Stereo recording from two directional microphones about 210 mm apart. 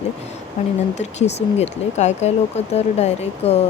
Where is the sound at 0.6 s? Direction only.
30° left (ahead or behind).